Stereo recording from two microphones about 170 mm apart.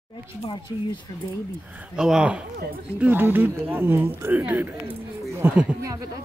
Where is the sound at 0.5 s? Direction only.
30° left (ahead or behind).